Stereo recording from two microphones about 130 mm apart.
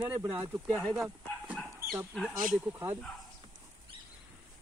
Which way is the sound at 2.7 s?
15° right (ahead or behind).